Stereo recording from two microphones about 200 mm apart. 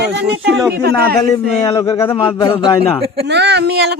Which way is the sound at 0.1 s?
55° right (ahead or behind).